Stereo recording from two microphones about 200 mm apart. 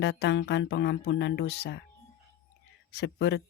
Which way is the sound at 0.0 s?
60° left (ahead or behind).